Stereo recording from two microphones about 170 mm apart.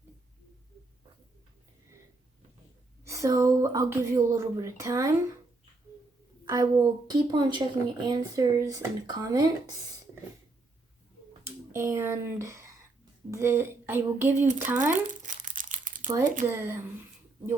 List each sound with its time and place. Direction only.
3.0 s speech: 20° right (ahead or behind)
6.4 s speech: 20° right (ahead or behind)
11.4 s a woman's voice: 15° right (ahead or behind)
15.0 s crumpling: 50° right (ahead or behind)
16.2 s speech: 50° right (ahead or behind)
16.5 s a woman's voice: 15° right (ahead or behind)